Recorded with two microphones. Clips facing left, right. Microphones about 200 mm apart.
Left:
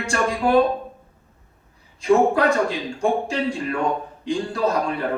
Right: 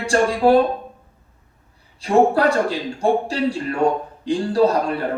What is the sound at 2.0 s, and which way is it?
A man's voice, 35° right (ahead or behind).